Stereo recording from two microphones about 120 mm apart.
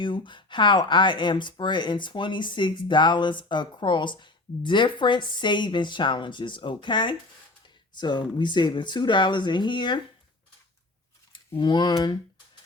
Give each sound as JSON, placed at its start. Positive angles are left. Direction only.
{"t": 0.0, "sound": "speech", "side_deg": 40}
{"t": 11.3, "sound": "speech", "side_deg": 40}